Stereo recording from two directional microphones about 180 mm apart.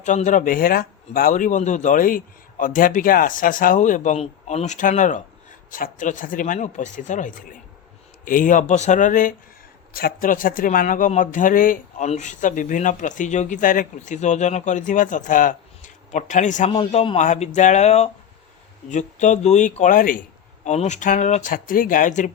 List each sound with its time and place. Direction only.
0.0 s speech: 45° left (ahead or behind)